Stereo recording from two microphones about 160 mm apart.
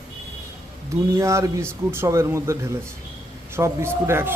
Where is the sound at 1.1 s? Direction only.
20° right (ahead or behind).